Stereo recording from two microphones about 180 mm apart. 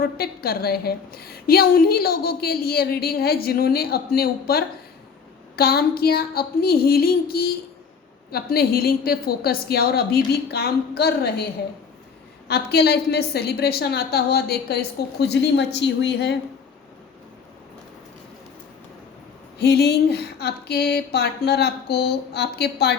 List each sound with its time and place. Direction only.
0.0 s a woman's voice: 60° left (ahead or behind)
12.5 s a woman's voice: 65° left (ahead or behind)
19.5 s a woman's voice: 65° left (ahead or behind)